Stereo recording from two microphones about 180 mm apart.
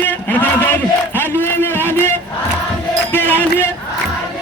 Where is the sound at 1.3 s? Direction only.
10° left (ahead or behind).